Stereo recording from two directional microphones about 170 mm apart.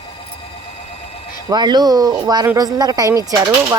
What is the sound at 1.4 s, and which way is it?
Speech, 25° right (ahead or behind).